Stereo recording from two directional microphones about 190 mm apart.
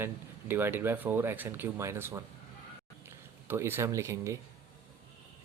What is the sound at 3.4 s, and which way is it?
Speech, 10° right (ahead or behind).